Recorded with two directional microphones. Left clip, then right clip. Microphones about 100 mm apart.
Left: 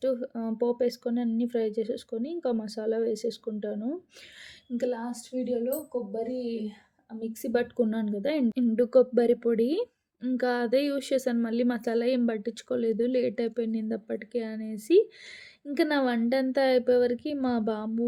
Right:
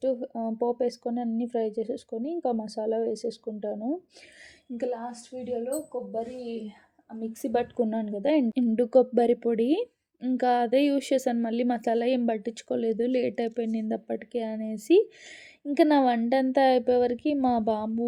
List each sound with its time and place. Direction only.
0.0 s speech: 25° right (ahead or behind)
4.8 s speech: 45° right (ahead or behind)
7.4 s speech: 45° right (ahead or behind)
7.8 s speech: 25° right (ahead or behind)